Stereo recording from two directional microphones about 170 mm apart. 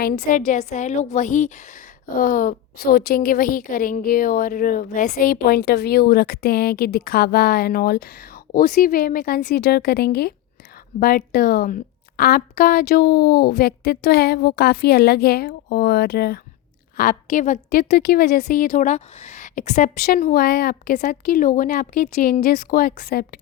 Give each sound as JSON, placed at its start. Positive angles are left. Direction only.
{"t": 0.0, "sound": "a woman's voice", "side_deg": 60}
{"t": 17.0, "sound": "a woman's voice", "side_deg": 50}
{"t": 18.4, "sound": "a woman's voice", "side_deg": 50}
{"t": 20.3, "sound": "a woman's voice", "side_deg": 65}